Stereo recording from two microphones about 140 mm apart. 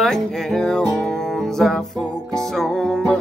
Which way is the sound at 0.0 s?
5° left (ahead or behind).